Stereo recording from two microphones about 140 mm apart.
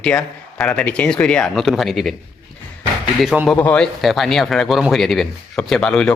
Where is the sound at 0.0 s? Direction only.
5° left (ahead or behind).